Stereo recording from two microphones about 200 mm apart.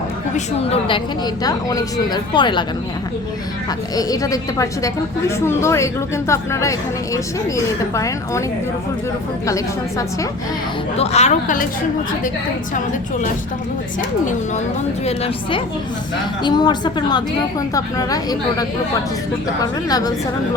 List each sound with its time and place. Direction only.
0.3 s speech: 30° left (ahead or behind)
3.9 s a woman's voice: 20° left (ahead or behind)
10.9 s a woman's voice: 30° left (ahead or behind)
15.0 s a woman's voice: 30° left (ahead or behind)